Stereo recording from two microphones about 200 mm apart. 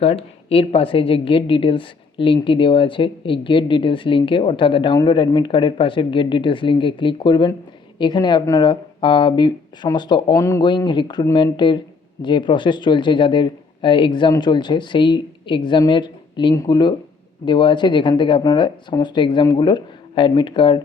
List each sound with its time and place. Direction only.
0.0 s a woman's voice: 30° left (ahead or behind)